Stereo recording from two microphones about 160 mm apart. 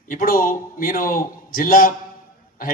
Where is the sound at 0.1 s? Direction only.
60° left (ahead or behind).